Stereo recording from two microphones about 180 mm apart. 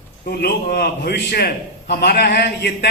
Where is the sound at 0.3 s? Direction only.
60° left (ahead or behind).